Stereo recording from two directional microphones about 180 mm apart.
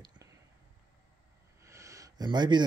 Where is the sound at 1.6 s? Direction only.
15° right (ahead or behind).